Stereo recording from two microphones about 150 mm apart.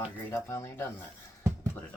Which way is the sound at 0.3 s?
15° left (ahead or behind).